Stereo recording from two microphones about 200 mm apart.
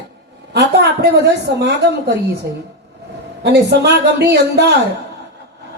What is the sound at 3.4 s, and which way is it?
Speech, 55° right (ahead or behind).